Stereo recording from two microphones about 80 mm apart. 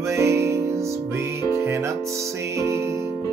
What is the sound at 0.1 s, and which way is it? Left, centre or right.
Music, right.